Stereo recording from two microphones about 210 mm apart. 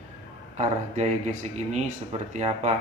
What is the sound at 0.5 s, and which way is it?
Speech, 35° right (ahead or behind).